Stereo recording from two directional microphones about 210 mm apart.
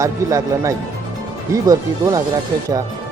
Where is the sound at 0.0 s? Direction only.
15° right (ahead or behind).